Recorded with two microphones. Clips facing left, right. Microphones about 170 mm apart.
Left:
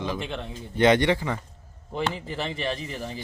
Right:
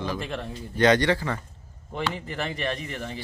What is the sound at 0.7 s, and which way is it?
Speech, 20° left (ahead or behind).